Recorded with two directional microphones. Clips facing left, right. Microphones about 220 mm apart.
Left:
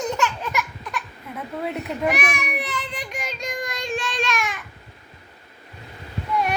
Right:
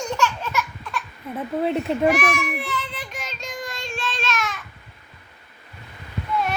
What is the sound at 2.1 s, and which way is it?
Child singing, 15° left (ahead or behind).